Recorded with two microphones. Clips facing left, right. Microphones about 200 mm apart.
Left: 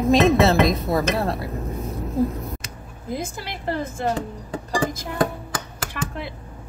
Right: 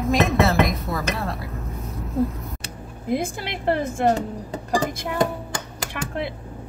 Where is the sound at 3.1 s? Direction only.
65° right (ahead or behind).